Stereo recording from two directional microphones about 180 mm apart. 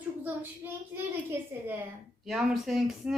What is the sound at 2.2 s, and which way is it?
Speech, centre (ahead or behind).